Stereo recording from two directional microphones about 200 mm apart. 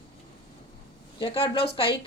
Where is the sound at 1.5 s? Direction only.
30° left (ahead or behind).